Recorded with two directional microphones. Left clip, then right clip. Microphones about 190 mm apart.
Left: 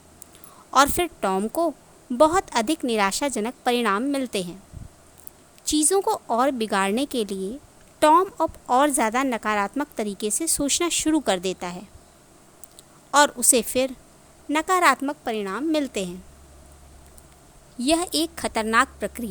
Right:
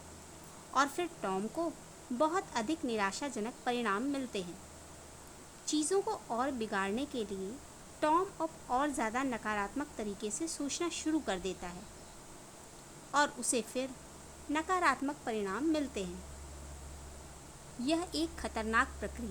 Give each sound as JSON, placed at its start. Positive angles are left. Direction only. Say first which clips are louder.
{"t": 0.7, "sound": "a woman's voice", "louder": "left 13 dB", "side_deg": 55}
{"t": 5.6, "sound": "a woman's voice", "louder": "left 11 dB", "side_deg": 55}
{"t": 13.1, "sound": "a woman's voice", "louder": "left 13 dB", "side_deg": 55}
{"t": 17.8, "sound": "a woman's voice", "louder": "left 12 dB", "side_deg": 55}